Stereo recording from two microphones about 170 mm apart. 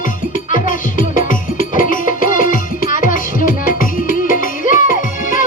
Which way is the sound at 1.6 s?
50° left (ahead or behind).